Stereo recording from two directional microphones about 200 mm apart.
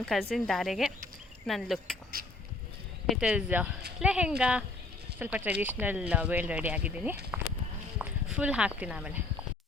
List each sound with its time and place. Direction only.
0.0 s a woman's voice: centre (ahead or behind)
2.2 s a sound: 50° right (ahead or behind)
3.1 s a woman's voice: 5° right (ahead or behind)